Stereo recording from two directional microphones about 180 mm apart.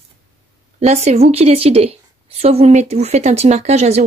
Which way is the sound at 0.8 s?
40° right (ahead or behind).